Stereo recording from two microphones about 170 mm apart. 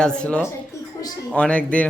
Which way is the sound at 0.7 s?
20° left (ahead or behind).